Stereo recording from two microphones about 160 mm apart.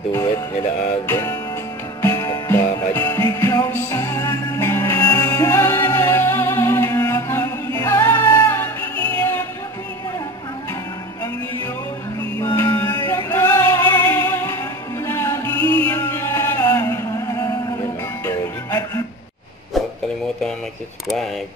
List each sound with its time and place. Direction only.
1.0 s music: 15° left (ahead or behind)
12.4 s male singing: 20° left (ahead or behind)
15.0 s music: 15° left (ahead or behind)